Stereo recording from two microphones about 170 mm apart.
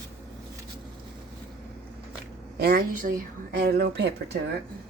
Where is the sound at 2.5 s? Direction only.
60° right (ahead or behind).